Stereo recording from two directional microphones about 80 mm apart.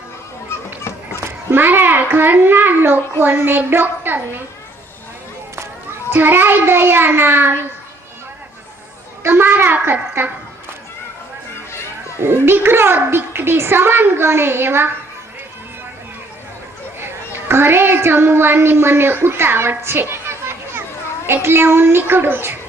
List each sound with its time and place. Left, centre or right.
1.5 s a child's voice: right
6.1 s a child's voice: right
9.2 s a child's voice: right
12.2 s a child's voice: right
17.5 s a woman's voice: right